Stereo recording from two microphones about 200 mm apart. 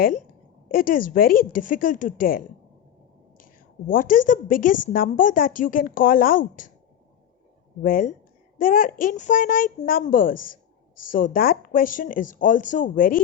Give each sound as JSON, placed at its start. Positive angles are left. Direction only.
{"t": 0.7, "sound": "a woman's voice", "side_deg": 45}
{"t": 7.8, "sound": "a woman's voice", "side_deg": 45}